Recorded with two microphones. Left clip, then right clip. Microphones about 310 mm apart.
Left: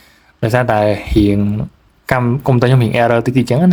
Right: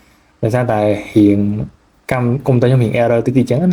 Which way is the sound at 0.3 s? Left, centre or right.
Left.